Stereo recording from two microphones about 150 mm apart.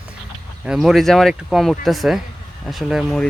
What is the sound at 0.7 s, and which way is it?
Speech, centre (ahead or behind).